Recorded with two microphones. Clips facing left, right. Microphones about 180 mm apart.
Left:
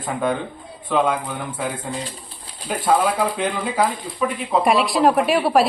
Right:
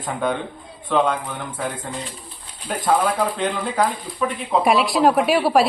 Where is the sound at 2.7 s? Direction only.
10° left (ahead or behind).